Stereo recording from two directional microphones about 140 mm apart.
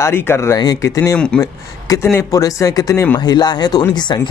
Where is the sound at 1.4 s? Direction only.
20° left (ahead or behind).